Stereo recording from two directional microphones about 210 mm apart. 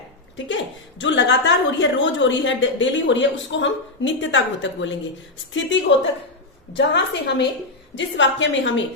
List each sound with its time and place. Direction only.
0.3 s a woman's voice: 60° left (ahead or behind)